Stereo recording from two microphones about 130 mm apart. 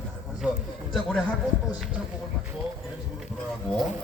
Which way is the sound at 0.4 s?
10° right (ahead or behind).